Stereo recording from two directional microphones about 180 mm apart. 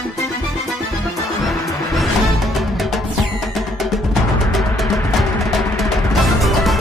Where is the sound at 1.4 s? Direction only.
Centre (ahead or behind).